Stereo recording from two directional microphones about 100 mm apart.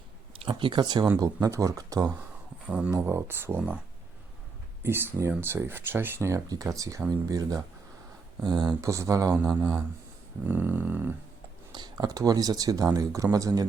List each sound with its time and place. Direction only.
0.4 s speech: 50° right (ahead or behind)
1.2 s speech: 35° right (ahead or behind)
2.6 s speech: 10° right (ahead or behind)
2.9 s speech: 25° right (ahead or behind)
4.8 s speech: 25° right (ahead or behind)
6.5 s speech: 35° right (ahead or behind)
8.8 s speech: 30° right (ahead or behind)
9.6 s speech: 20° right (ahead or behind)
11.7 s speech: 45° right (ahead or behind)